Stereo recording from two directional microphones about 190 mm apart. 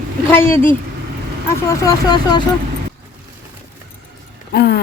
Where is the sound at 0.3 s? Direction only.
10° left (ahead or behind).